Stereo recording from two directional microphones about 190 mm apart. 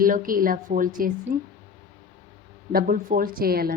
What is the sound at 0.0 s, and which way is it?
A woman's voice, 45° right (ahead or behind).